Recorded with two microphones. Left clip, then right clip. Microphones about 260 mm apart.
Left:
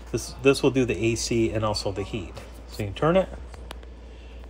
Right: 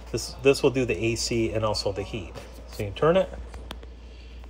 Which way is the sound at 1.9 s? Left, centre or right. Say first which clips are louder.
Right 1 dB; left.